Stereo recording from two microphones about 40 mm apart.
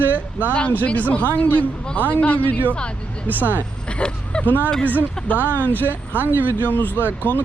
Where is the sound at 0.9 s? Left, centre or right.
Left.